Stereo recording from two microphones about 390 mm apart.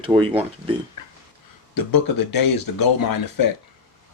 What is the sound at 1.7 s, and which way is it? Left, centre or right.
Speech, left.